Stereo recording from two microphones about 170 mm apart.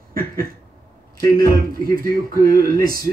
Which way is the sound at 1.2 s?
60° right (ahead or behind).